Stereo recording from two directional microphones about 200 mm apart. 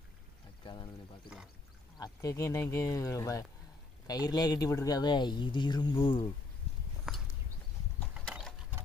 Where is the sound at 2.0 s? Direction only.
15° left (ahead or behind).